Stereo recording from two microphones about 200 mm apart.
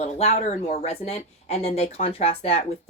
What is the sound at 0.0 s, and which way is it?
A woman's voice, 35° left (ahead or behind).